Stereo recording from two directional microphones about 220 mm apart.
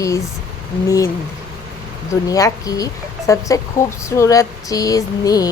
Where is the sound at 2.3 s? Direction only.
15° left (ahead or behind).